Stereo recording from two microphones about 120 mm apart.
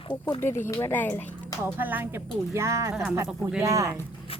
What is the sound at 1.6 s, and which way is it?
Speech, 15° right (ahead or behind).